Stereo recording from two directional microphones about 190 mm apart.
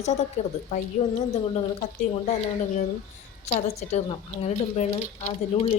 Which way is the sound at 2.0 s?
35° left (ahead or behind).